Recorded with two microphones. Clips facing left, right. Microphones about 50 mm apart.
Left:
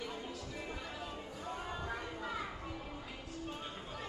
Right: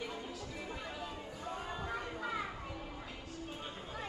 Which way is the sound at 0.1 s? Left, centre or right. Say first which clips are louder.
Even; centre.